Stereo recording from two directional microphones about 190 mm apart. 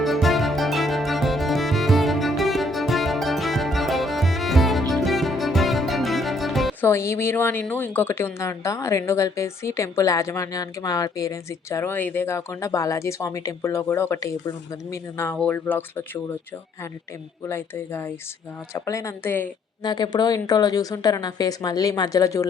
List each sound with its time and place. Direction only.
0.0 s music: centre (ahead or behind)
6.8 s a woman's voice: 15° left (ahead or behind)
17.5 s a woman's voice: 10° left (ahead or behind)